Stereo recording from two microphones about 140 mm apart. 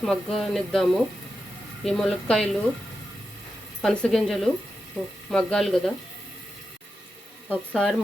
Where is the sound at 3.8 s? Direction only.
5° left (ahead or behind).